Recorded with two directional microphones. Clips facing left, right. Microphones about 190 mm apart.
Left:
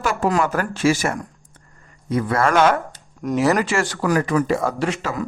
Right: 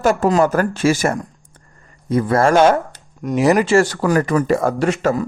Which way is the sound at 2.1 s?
35° right (ahead or behind).